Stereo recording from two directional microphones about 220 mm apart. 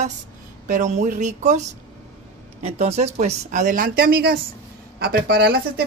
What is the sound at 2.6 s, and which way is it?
Speech, 25° right (ahead or behind).